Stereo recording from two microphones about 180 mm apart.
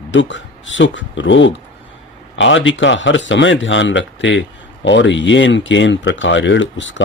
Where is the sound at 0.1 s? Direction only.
90° left.